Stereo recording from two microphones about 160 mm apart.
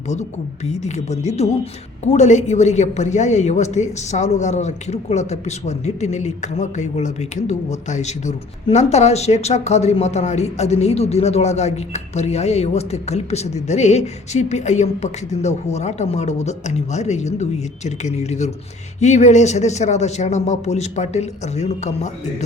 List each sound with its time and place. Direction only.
0.1 s a woman's voice: 45° left (ahead or behind)